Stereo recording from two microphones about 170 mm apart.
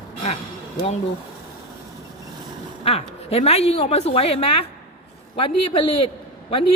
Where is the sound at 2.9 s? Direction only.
35° left (ahead or behind).